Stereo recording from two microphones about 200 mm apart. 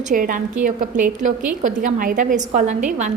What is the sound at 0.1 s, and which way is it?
A woman's voice, 40° right (ahead or behind).